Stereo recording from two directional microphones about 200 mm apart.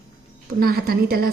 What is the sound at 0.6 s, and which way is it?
Speech, 50° right (ahead or behind).